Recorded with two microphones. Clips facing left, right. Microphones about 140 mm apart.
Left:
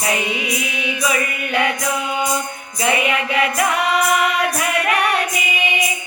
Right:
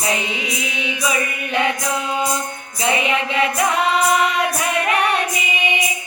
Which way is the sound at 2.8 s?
25° right (ahead or behind).